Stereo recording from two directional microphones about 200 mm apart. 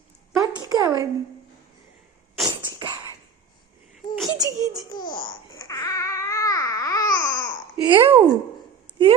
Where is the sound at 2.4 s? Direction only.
25° right (ahead or behind).